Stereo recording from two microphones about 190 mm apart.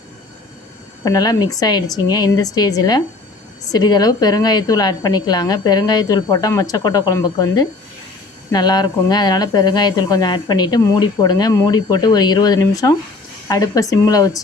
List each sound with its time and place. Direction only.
1.0 s speech: 20° left (ahead or behind)